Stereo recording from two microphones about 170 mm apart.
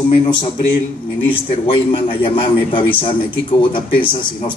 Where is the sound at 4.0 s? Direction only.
30° left (ahead or behind).